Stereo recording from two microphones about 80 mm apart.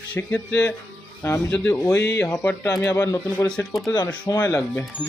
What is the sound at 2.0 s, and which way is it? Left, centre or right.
Speech, left.